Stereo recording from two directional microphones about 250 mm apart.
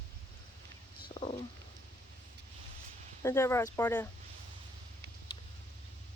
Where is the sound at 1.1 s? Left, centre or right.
Centre.